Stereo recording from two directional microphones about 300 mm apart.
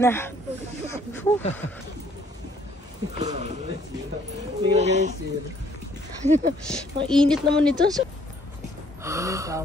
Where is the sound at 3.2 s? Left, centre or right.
Right.